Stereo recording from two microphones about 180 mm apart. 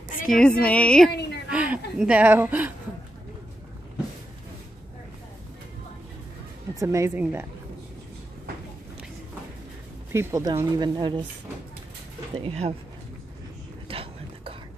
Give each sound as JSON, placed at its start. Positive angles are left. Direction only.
{"t": 0.1, "sound": "music", "side_deg": 50}
{"t": 0.4, "sound": "speech", "side_deg": 5}
{"t": 1.5, "sound": "a sound", "side_deg": -5}
{"t": 2.0, "sound": "speech", "side_deg": -5}
{"t": 6.8, "sound": "speech", "side_deg": -15}
{"t": 10.1, "sound": "speech", "side_deg": -15}
{"t": 12.4, "sound": "speech", "side_deg": -35}
{"t": 13.8, "sound": "a sound", "side_deg": -30}